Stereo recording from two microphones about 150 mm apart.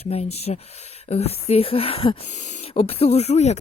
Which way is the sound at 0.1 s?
45° left (ahead or behind).